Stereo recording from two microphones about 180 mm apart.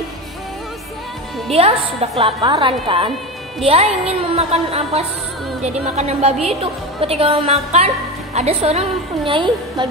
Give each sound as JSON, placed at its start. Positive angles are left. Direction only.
{"t": 1.5, "sound": "a woman's voice", "side_deg": -35}